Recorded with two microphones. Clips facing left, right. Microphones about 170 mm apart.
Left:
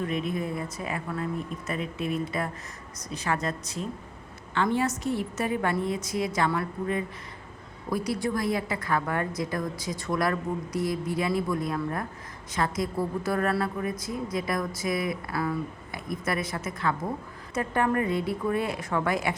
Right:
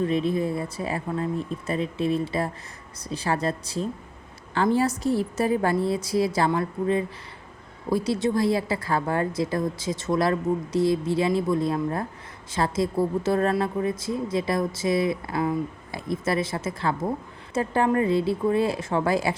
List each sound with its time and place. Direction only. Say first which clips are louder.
0.0 s a woman's voice: right 6 dB; 30° right (ahead or behind)